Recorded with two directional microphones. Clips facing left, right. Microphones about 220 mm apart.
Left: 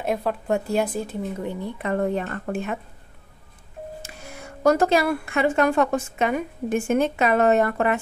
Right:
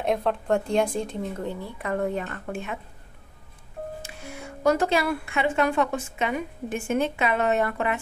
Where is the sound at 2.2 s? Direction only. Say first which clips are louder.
Left 5 dB; 40° left (ahead or behind).